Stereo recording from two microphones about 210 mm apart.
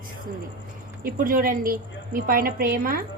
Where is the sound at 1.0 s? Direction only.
40° right (ahead or behind).